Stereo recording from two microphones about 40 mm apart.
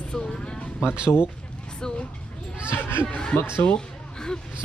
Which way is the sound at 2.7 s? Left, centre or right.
Left.